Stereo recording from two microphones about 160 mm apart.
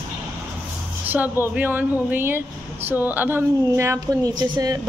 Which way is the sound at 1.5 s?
10° right (ahead or behind).